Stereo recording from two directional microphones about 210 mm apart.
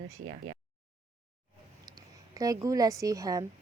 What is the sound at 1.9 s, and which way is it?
Speech, 20° right (ahead or behind).